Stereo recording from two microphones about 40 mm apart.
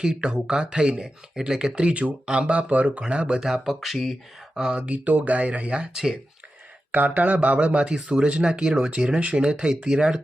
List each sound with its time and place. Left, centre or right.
0.0 s speech: right
1.4 s speech: centre
1.7 s speech: right
3.4 s speech: centre
4.8 s speech: right
6.9 s speech: right